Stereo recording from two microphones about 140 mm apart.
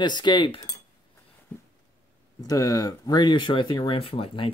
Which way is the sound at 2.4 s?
25° left (ahead or behind).